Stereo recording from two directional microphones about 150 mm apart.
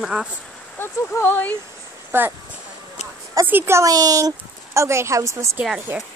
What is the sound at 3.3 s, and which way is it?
Speech, 15° right (ahead or behind).